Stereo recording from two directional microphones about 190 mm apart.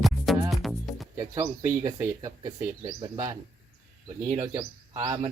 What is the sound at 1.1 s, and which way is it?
Bird, 15° right (ahead or behind).